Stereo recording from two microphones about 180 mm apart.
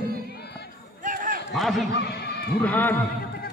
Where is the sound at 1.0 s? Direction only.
50° right (ahead or behind).